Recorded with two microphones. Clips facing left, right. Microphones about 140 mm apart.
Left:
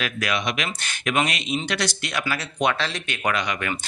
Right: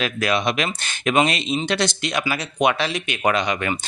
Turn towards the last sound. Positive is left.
turn(degrees=-25)  # may be behind; listen again after turning